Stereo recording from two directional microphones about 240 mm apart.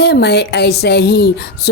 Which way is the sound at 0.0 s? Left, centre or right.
Left.